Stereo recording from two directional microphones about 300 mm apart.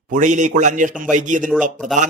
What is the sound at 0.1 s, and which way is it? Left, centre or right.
Speech, right.